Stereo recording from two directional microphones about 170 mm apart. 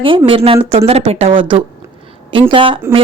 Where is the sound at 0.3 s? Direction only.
35° right (ahead or behind).